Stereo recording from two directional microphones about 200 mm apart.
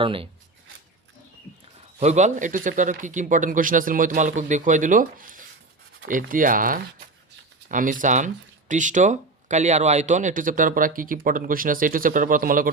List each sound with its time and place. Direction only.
0.0 s speech: 25° right (ahead or behind)
2.0 s speech: 35° right (ahead or behind)